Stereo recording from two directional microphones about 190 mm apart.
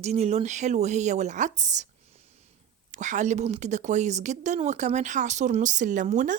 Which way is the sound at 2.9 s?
40° right (ahead or behind).